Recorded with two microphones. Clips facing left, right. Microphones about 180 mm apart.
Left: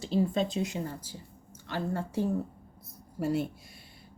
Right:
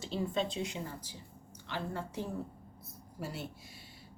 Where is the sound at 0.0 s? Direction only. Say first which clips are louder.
Left 6 dB; 35° left (ahead or behind).